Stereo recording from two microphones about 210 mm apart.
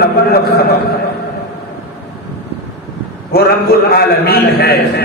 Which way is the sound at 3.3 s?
50° left (ahead or behind).